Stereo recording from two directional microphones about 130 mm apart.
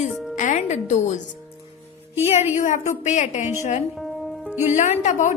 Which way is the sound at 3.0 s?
65° left (ahead or behind).